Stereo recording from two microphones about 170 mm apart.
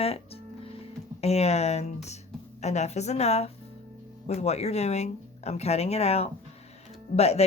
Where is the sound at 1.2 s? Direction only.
40° left (ahead or behind).